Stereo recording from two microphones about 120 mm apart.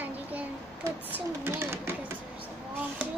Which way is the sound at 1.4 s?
20° right (ahead or behind).